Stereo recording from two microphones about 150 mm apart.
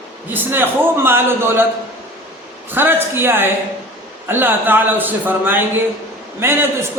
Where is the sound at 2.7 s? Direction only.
15° right (ahead or behind).